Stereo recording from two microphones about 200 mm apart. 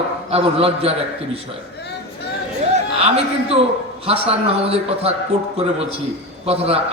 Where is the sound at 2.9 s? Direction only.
30° right (ahead or behind).